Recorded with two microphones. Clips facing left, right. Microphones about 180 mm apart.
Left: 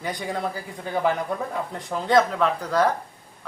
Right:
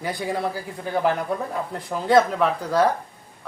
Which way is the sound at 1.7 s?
5° right (ahead or behind).